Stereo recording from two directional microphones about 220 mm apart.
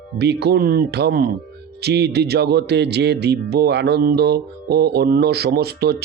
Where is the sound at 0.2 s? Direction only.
50° right (ahead or behind).